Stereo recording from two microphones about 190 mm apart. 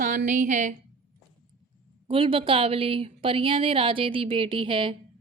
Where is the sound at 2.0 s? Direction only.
30° right (ahead or behind).